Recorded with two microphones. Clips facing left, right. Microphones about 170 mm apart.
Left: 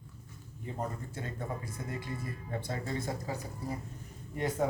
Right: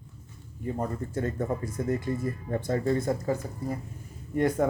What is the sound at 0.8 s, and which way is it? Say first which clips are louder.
Speech: right 7 dB; 50° right (ahead or behind).